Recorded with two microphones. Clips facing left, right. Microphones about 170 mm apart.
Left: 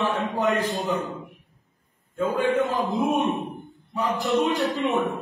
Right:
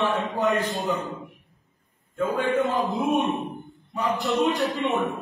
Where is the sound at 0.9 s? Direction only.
20° left (ahead or behind).